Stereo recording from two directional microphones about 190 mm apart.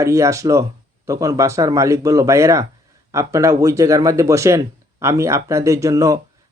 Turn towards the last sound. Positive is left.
turn(degrees=-15)  # may be behind; listen again after turning